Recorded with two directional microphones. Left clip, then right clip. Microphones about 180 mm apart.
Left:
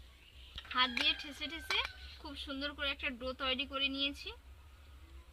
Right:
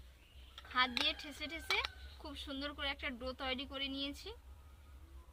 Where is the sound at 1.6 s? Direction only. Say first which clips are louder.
Left 1 dB; 20° right (ahead or behind).